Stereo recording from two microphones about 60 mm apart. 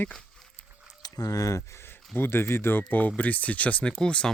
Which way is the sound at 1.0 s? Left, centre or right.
Left.